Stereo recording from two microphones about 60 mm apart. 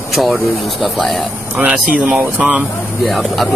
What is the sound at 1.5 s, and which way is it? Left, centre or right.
Speech, right.